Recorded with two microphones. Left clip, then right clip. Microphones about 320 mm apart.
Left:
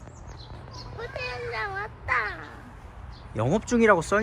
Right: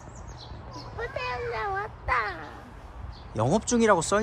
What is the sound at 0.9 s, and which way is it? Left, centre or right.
Speech, centre.